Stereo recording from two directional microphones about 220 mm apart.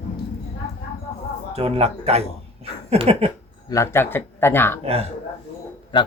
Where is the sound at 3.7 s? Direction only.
15° left (ahead or behind).